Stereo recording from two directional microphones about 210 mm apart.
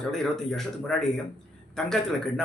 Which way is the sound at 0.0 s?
Centre (ahead or behind).